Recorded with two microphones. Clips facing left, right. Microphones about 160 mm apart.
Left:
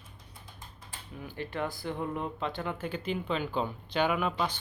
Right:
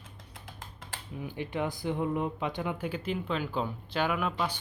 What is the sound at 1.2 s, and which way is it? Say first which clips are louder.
Speech: right 2 dB; 15° right (ahead or behind).